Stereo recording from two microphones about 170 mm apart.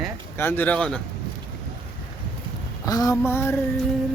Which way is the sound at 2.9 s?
20° left (ahead or behind).